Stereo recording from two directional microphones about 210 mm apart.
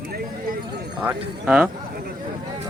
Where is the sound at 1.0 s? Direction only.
5° right (ahead or behind).